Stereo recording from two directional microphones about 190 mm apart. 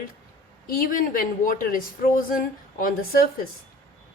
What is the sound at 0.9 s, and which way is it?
A woman's voice, 45° left (ahead or behind).